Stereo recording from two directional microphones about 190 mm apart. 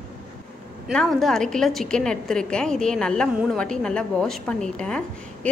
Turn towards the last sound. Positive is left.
turn(degrees=5)  # may be behind; listen again after turning